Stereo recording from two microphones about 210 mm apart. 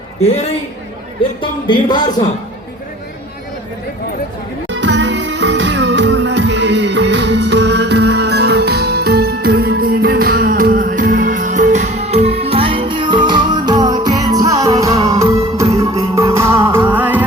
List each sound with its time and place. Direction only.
1.4 s speech: 20° left (ahead or behind)
4.7 s music: 60° right (ahead or behind); by 17.2 s 10° right (ahead or behind)